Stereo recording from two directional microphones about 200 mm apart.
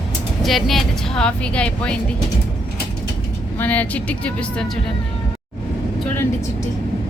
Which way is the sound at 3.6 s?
10° left (ahead or behind).